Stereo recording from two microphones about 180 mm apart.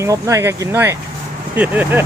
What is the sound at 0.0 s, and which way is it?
Speech, 15° right (ahead or behind).